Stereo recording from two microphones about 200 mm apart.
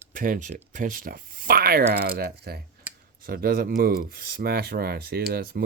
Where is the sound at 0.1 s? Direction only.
40° right (ahead or behind).